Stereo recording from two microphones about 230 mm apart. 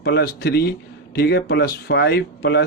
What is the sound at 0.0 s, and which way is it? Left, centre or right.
A man's voice, left.